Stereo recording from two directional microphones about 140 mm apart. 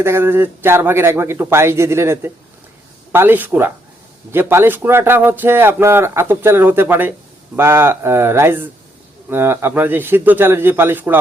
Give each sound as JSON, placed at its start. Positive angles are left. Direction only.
{"t": 0.0, "sound": "speech", "side_deg": -15}